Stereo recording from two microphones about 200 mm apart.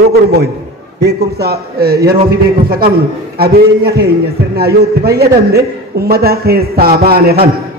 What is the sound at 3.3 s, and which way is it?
A man's voice, 50° right (ahead or behind).